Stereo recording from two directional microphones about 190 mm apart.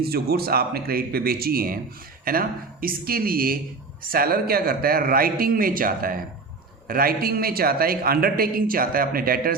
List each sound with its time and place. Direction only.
0.0 s a man's voice: 55° right (ahead or behind)